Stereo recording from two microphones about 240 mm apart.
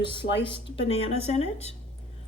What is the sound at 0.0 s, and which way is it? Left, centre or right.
Speech, left.